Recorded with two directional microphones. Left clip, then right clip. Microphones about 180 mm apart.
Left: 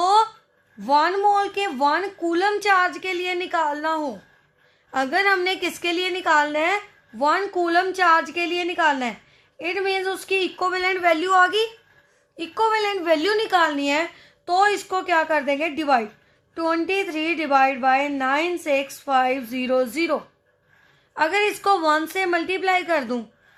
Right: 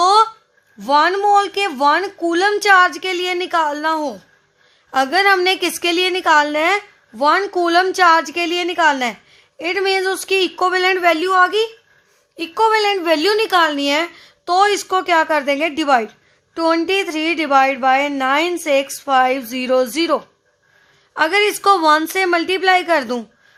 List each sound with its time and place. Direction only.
0.0 s a sound: 55° right (ahead or behind)
0.8 s a woman's voice: 50° right (ahead or behind); by 11.7 s 25° right (ahead or behind)
12.4 s a woman's voice: 50° right (ahead or behind)